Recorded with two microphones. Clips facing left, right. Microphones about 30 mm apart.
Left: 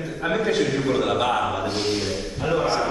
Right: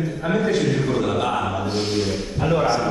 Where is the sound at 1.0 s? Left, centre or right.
Left.